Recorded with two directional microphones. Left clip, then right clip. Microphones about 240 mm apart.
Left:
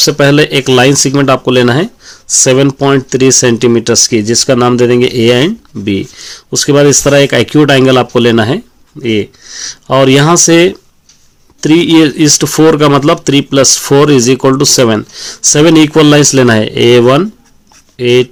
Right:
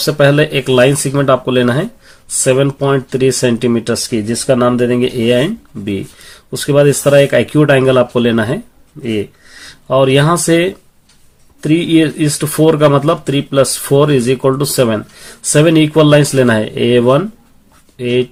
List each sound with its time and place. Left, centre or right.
0.0 s speech: left